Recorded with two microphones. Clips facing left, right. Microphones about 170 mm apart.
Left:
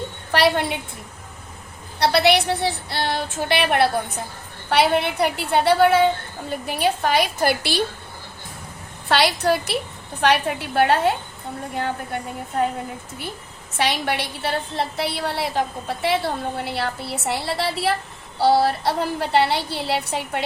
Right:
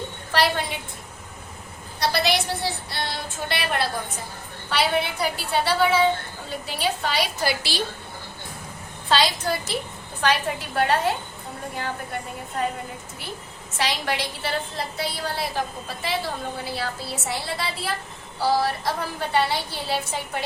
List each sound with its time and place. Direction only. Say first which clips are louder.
0.3 s a woman's voice: left 4 dB; 60° left (ahead or behind)
2.0 s a woman's voice: left 6 dB; 65° left (ahead or behind)
9.0 s a woman's voice: left 4 dB; 65° left (ahead or behind)
13.7 s a woman's voice: left 3 dB; 60° left (ahead or behind)